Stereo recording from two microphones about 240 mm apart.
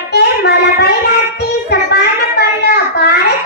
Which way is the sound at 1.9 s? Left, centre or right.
Left.